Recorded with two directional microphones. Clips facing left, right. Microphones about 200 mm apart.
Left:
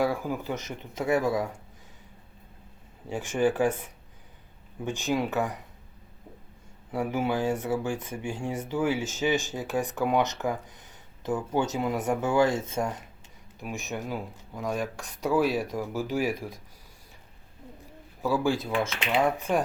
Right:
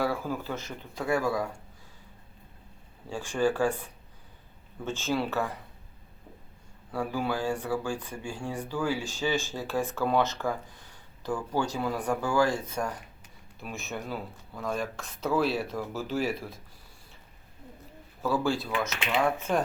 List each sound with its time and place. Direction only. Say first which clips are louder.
0.0 s speech: left 2 dB; 15° left (ahead or behind)
3.1 s speech: left 2 dB; 20° left (ahead or behind)
6.9 s speech: left 3 dB; 20° left (ahead or behind)
18.2 s speech: left 2 dB; 15° left (ahead or behind)
18.8 s speech: left 2 dB; 30° left (ahead or behind)
19.4 s speech: left 1 dB; 10° left (ahead or behind)